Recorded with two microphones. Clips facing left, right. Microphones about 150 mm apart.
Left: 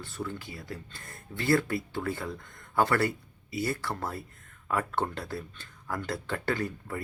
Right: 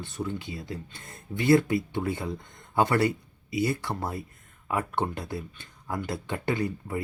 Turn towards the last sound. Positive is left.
turn(degrees=-15)  # may be behind; listen again after turning